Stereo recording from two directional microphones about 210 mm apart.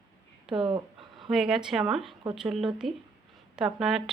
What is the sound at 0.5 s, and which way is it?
Speech, 25° right (ahead or behind).